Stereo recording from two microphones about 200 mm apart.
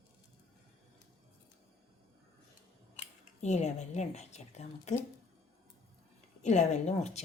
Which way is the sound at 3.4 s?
35° left (ahead or behind).